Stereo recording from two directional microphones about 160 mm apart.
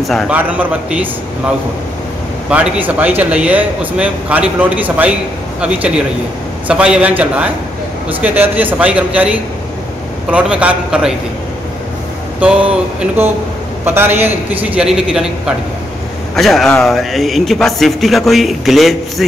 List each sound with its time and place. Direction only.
0.0 s a man's voice: centre (ahead or behind)
0.3 s speech: 10° right (ahead or behind)
2.5 s a man's voice: 5° right (ahead or behind)
12.4 s a man's voice: 5° right (ahead or behind)